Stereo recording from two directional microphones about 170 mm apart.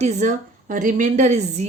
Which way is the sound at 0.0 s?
45° right (ahead or behind).